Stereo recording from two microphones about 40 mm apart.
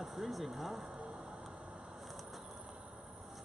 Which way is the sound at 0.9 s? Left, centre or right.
Right.